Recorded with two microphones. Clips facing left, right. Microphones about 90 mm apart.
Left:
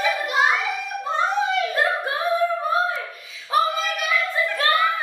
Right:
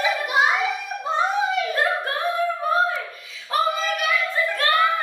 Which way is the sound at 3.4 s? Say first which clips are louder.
Left 1 dB; 5° left (ahead or behind).